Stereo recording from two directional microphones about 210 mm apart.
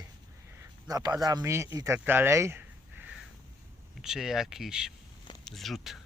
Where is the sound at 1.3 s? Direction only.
15° right (ahead or behind).